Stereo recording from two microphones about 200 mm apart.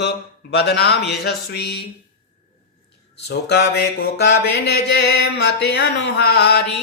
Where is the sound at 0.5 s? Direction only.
55° left (ahead or behind).